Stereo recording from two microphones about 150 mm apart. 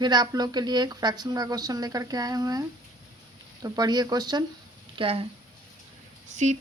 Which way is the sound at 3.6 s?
25° right (ahead or behind).